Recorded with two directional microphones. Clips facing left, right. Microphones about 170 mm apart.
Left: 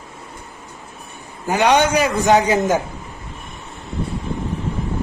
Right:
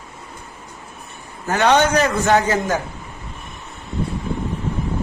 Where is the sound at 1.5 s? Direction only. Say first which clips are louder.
Even; 15° left (ahead or behind).